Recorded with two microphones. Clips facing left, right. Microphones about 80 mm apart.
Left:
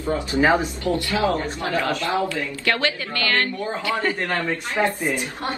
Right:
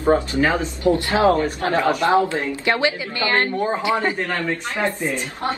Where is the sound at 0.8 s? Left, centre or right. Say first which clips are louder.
Right 8 dB; right.